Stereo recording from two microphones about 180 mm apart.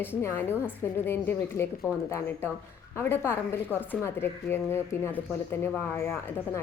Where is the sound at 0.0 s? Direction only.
15° left (ahead or behind).